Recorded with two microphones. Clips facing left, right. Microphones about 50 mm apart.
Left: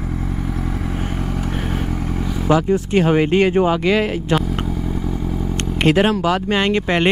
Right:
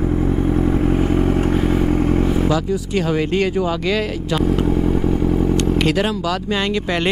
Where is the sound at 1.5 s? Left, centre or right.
Right.